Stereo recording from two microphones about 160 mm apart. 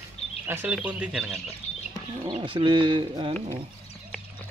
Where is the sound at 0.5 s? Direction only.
10° right (ahead or behind).